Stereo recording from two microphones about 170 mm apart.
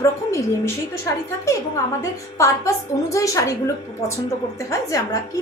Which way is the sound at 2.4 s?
15° left (ahead or behind).